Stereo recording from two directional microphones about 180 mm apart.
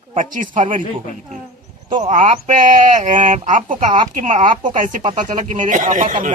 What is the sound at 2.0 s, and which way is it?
Speech, 45° right (ahead or behind).